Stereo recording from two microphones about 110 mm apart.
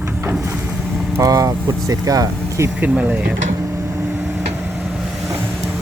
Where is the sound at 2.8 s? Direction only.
15° right (ahead or behind).